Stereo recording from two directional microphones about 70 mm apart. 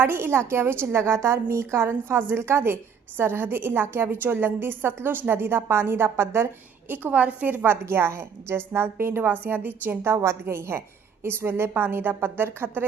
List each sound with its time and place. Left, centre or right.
0.0 s a woman's voice: right
6.9 s a woman's voice: right